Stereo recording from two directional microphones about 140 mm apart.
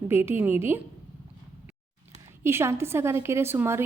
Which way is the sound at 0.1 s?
15° right (ahead or behind).